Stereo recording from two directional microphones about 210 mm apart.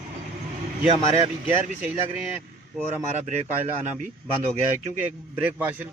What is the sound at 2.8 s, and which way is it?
Speech, 5° right (ahead or behind).